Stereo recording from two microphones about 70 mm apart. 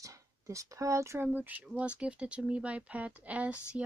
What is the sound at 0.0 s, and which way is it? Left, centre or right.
Speech, right.